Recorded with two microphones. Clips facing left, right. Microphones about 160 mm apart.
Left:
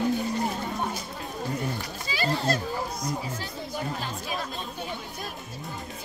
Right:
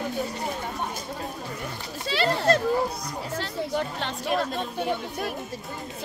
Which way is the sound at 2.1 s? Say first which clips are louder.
Right 5 dB; 65° right (ahead or behind).